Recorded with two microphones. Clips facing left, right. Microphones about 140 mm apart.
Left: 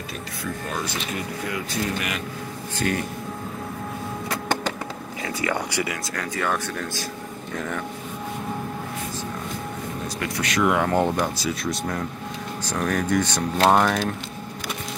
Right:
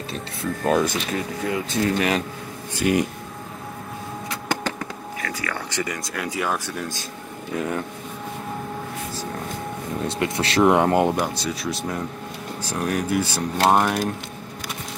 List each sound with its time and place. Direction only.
0.7 s speech: 55° right (ahead or behind)
1.1 s speech: 30° right (ahead or behind)
2.7 s speech: 15° right (ahead or behind)
5.2 s vehicle: 25° left (ahead or behind)
5.7 s speech: 10° left (ahead or behind)
6.1 s speech: 10° right (ahead or behind)
10.0 s speech: 25° right (ahead or behind)
11.3 s speech: centre (ahead or behind)